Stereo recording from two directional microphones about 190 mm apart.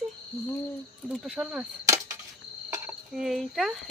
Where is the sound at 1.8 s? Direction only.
15° right (ahead or behind).